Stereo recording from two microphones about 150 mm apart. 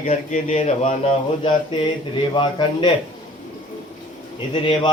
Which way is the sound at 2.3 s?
30° left (ahead or behind).